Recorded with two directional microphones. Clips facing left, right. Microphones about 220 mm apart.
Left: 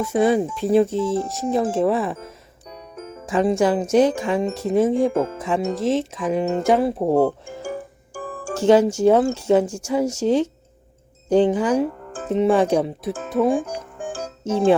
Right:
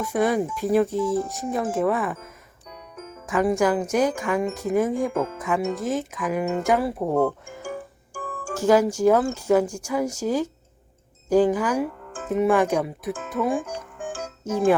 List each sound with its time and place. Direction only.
0.0 s speech: 25° left (ahead or behind)
12.1 s music: 35° left (ahead or behind)
12.4 s speech: 30° left (ahead or behind)
13.6 s music: 35° left (ahead or behind)